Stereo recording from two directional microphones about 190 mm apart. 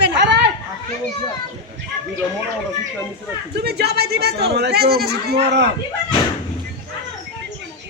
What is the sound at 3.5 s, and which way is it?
Speech, 60° right (ahead or behind).